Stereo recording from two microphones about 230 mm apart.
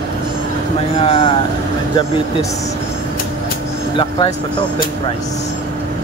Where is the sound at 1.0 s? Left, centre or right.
Left.